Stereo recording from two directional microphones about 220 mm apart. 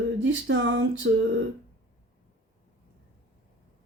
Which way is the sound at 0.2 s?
60° right (ahead or behind).